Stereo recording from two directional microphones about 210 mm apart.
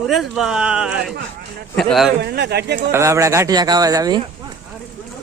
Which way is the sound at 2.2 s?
50° right (ahead or behind).